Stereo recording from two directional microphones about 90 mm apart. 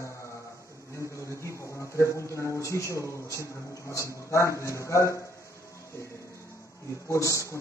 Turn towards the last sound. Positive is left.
turn(degrees=35)  # may be behind; listen again after turning